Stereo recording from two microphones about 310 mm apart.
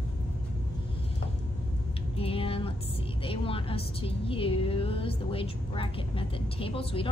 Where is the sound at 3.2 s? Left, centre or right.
Centre.